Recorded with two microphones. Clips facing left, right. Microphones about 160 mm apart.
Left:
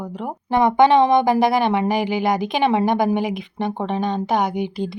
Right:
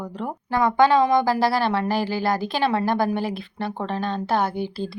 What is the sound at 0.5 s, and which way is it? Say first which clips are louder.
A woman's voice: left 3 dB; 20° left (ahead or behind).